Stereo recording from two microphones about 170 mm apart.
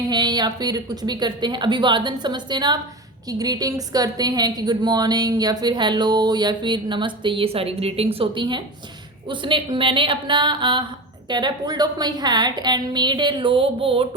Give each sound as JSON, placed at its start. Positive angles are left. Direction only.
{"t": 0.1, "sound": "a woman's voice", "side_deg": -25}